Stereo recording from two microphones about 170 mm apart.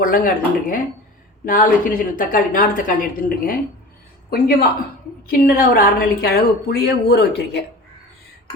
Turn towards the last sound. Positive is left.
turn(degrees=75)  # may be behind; listen again after turning